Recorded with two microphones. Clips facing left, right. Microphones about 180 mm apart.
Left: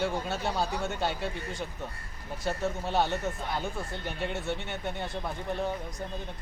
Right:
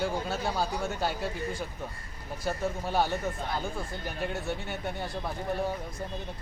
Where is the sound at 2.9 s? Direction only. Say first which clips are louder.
Even; 5° right (ahead or behind).